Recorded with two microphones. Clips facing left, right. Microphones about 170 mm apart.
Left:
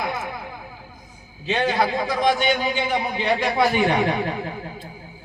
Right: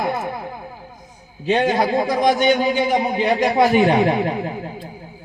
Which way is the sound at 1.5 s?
20° right (ahead or behind).